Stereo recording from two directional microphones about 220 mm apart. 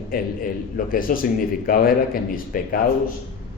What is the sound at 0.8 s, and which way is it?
A man's voice, 40° left (ahead or behind).